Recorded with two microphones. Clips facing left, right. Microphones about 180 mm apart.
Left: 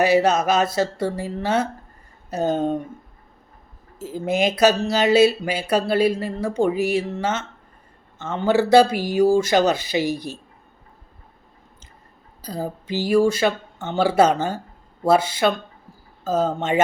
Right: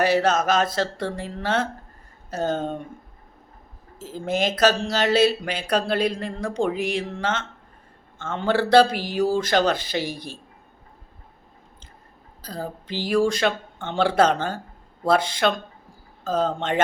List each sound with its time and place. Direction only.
0.0 s speech: 10° left (ahead or behind)
4.3 s speech: 10° left (ahead or behind)
10.0 s speech: 45° left (ahead or behind)
12.4 s a woman's voice: 10° left (ahead or behind)